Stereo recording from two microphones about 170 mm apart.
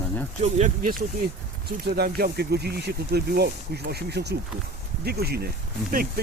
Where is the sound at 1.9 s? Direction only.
65° right (ahead or behind).